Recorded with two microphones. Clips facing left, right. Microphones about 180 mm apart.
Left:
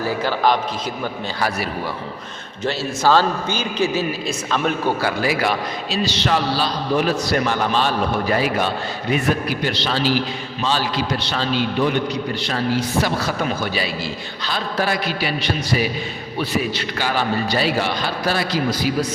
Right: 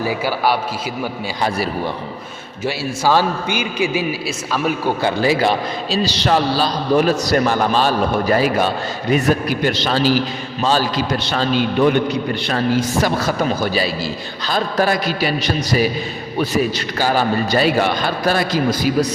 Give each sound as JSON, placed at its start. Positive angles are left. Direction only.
{"t": 0.0, "sound": "a man's voice", "side_deg": -10}
{"t": 1.4, "sound": "a man's voice", "side_deg": -25}
{"t": 2.6, "sound": "a man's voice", "side_deg": -10}
{"t": 5.0, "sound": "a man's voice", "side_deg": -25}